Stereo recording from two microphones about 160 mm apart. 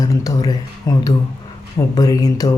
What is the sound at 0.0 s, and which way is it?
Speech, 25° left (ahead or behind).